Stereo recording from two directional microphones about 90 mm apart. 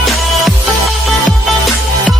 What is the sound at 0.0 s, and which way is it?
Music, centre (ahead or behind).